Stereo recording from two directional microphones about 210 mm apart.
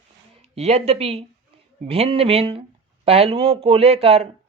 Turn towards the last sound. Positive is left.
turn(degrees=-30)  # may be behind; listen again after turning